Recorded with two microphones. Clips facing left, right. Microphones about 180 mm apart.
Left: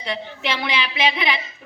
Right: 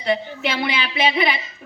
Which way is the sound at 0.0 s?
45° right (ahead or behind).